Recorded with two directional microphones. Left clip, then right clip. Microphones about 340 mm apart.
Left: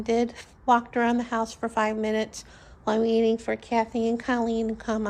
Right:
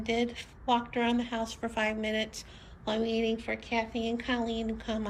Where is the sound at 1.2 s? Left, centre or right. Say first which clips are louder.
Left 6 dB; centre.